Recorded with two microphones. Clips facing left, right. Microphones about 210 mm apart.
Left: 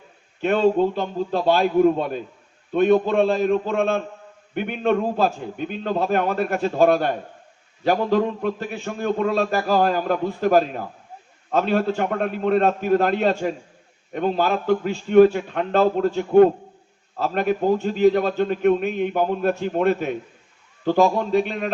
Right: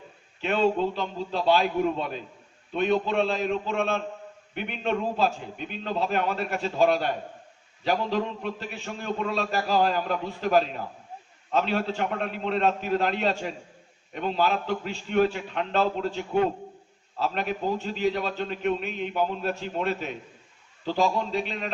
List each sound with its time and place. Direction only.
0.4 s a man's voice: 50° left (ahead or behind)